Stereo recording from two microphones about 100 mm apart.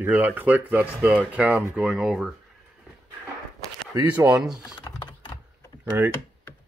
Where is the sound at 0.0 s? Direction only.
15° right (ahead or behind).